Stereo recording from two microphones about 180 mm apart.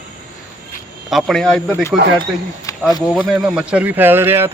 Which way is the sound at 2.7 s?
20° left (ahead or behind).